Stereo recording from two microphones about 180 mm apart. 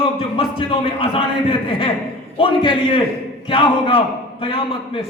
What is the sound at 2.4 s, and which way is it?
A man's voice, 30° left (ahead or behind).